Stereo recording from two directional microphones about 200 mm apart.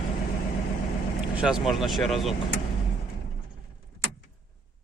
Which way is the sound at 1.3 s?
5° right (ahead or behind).